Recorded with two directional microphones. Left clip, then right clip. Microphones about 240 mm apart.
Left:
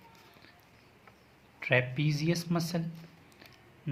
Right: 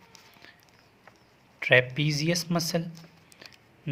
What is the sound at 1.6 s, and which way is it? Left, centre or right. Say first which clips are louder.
A man's voice: right 7 dB; right.